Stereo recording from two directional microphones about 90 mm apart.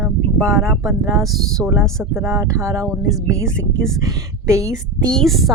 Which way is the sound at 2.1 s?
30° right (ahead or behind).